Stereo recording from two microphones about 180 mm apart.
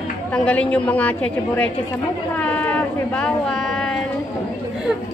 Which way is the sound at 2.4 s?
5° left (ahead or behind).